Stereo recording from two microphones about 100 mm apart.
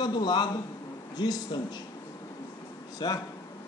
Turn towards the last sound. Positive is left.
turn(degrees=50)  # may be behind; listen again after turning